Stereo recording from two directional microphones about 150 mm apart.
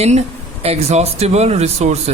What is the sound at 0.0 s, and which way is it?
Speech, 45° right (ahead or behind).